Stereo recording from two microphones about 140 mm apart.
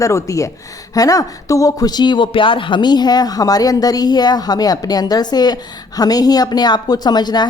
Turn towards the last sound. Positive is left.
turn(degrees=30)  # may be behind; listen again after turning